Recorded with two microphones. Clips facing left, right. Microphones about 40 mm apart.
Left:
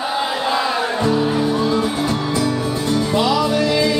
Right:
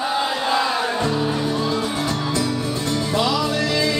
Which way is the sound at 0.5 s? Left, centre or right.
Centre.